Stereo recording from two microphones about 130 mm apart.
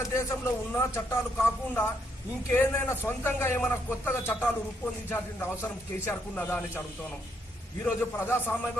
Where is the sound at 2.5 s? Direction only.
15° left (ahead or behind).